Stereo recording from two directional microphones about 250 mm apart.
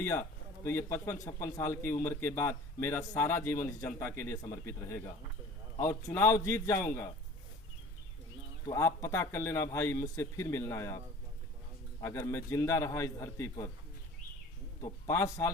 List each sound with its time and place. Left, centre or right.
0.0 s a man's voice: centre
8.6 s a man's voice: centre
14.8 s a man's voice: centre